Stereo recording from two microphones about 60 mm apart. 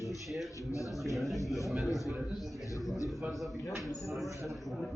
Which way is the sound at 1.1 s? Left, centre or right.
Centre.